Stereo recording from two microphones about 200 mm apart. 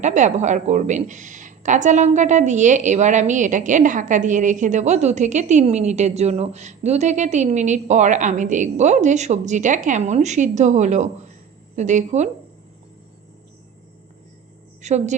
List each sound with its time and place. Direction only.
0.0 s a woman's voice: 35° right (ahead or behind)
14.8 s a woman's voice: 35° right (ahead or behind)